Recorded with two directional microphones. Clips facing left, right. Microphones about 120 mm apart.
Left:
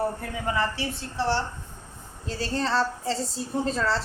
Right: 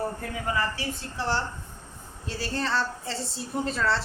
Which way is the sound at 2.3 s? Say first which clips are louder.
Left 3 dB; 30° left (ahead or behind).